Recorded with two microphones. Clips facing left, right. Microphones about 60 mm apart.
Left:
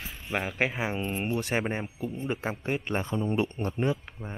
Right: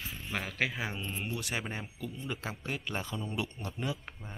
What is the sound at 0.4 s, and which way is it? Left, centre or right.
Speech, left.